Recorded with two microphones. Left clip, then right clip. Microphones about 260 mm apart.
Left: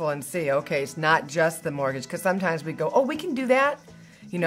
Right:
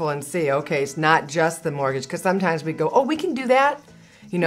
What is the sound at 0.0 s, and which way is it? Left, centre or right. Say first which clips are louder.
Speech: right 3 dB; right.